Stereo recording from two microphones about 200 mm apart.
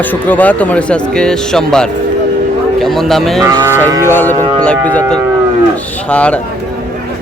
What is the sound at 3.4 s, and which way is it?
Livestock, 20° right (ahead or behind).